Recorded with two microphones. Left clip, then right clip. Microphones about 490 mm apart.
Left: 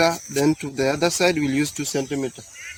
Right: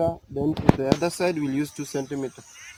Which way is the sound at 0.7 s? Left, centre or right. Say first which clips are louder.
Left 4 dB; right.